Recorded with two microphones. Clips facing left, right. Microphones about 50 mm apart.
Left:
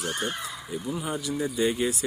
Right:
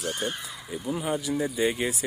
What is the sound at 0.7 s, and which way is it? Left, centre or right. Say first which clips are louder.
Speech: right 3 dB; centre.